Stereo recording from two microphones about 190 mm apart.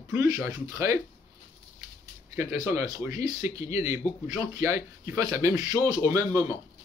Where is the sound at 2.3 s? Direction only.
15° right (ahead or behind).